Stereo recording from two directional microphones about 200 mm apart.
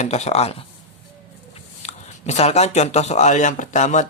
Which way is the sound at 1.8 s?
35° left (ahead or behind).